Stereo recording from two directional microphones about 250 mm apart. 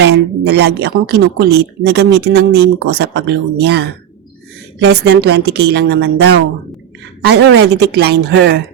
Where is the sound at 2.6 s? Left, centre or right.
Right.